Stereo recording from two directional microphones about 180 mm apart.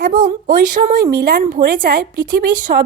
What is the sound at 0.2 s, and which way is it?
A woman's voice, 50° right (ahead or behind).